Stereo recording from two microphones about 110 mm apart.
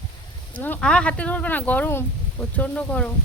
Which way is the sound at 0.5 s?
15° left (ahead or behind).